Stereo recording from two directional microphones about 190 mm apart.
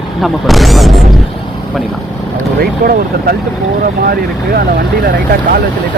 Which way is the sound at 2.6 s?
55° right (ahead or behind).